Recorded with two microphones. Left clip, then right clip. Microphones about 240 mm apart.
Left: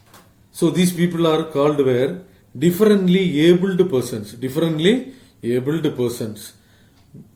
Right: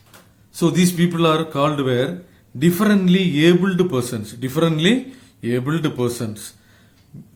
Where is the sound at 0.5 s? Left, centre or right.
Right.